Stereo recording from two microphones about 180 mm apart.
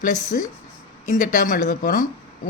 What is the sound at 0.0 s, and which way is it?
Speech, 45° left (ahead or behind).